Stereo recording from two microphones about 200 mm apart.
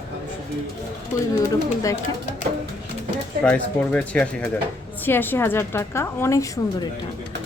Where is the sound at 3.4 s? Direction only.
5° left (ahead or behind).